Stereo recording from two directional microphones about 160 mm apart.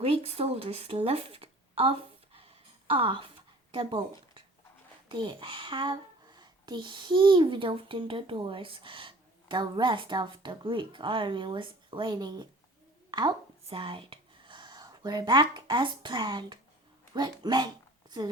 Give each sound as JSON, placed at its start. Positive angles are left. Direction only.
{"t": 0.0, "sound": "speech", "side_deg": -40}
{"t": 13.1, "sound": "a sound", "side_deg": -25}
{"t": 13.7, "sound": "speech", "side_deg": -35}